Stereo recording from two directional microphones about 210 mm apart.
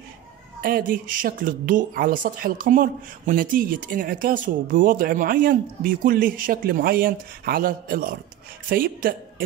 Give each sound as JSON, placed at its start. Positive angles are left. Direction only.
{"t": 0.6, "sound": "a woman's voice", "side_deg": -45}